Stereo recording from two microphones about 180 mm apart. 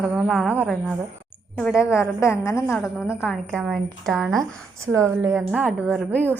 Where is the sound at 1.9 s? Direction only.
15° left (ahead or behind).